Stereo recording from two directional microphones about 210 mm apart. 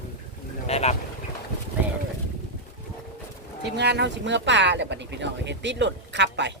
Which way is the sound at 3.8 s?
55° right (ahead or behind).